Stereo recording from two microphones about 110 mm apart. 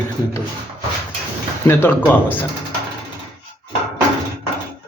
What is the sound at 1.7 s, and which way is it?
Speech, 15° left (ahead or behind).